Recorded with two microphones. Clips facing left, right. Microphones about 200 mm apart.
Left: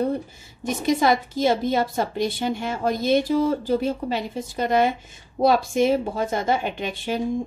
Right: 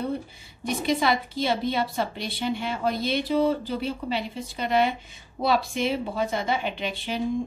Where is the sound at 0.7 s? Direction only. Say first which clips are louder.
Left 4 dB; 45° left (ahead or behind).